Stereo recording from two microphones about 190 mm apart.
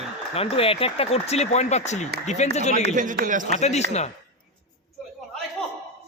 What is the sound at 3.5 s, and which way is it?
Speech, 35° left (ahead or behind).